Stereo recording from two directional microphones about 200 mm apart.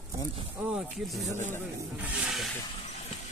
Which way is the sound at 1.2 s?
35° right (ahead or behind).